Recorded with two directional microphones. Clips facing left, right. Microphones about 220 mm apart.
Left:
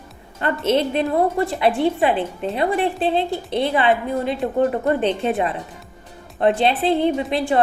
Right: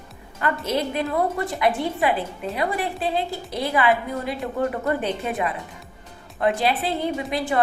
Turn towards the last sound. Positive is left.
turn(degrees=25)  # may be behind; listen again after turning